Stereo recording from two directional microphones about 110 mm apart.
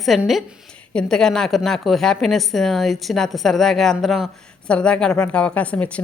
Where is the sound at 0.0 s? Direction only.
Centre (ahead or behind).